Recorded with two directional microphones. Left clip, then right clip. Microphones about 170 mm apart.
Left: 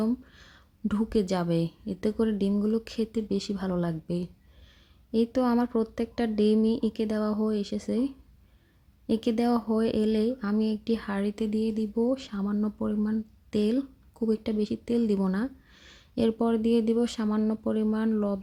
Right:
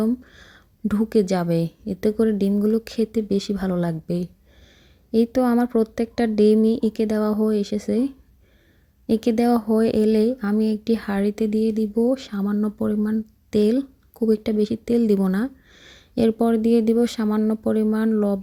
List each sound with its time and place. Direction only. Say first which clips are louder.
0.0 s speech: right 6 dB; 25° right (ahead or behind)